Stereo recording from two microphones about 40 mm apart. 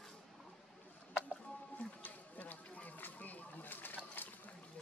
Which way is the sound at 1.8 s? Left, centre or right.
Left.